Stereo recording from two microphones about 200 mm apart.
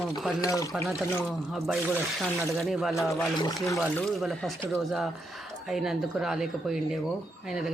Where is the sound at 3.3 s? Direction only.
20° left (ahead or behind).